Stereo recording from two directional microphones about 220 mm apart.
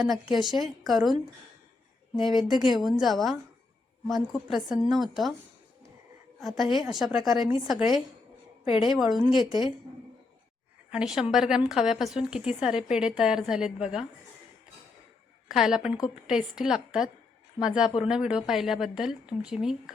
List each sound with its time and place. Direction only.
0.0 s a woman's voice: centre (ahead or behind)
2.1 s a woman's voice: centre (ahead or behind)
2.5 s a woman's voice: 20° right (ahead or behind)
3.0 s a woman's voice: centre (ahead or behind)
6.4 s a woman's voice: centre (ahead or behind)
10.9 s a woman's voice: centre (ahead or behind)
15.4 s a woman's voice: centre (ahead or behind)